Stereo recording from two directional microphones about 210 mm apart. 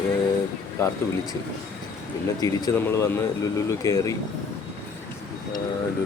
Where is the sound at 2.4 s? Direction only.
15° left (ahead or behind).